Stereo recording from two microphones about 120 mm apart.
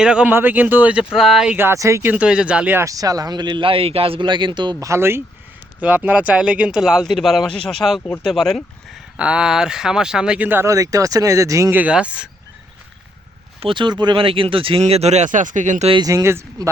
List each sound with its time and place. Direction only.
0.0 s speech: 5° right (ahead or behind)
1.5 s speech: 20° right (ahead or behind)
2.8 s speech: 30° right (ahead or behind)
4.9 s speech: 20° right (ahead or behind)
11.8 s speech: 10° right (ahead or behind)
13.6 s speech: 45° right (ahead or behind); by 15.9 s 90° right
16.0 s speech: 25° right (ahead or behind)